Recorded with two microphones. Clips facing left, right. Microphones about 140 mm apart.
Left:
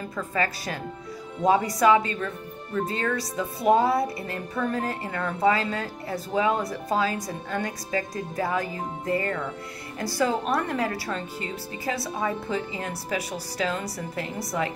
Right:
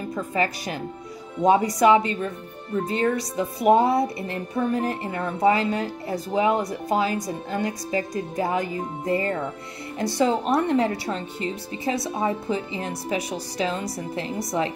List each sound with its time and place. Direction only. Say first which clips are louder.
0.1 s speech: right 3 dB; 20° right (ahead or behind)
1.8 s speech: right 2 dB; 25° right (ahead or behind)